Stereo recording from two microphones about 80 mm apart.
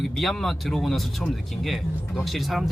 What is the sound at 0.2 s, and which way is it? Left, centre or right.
Speech, centre.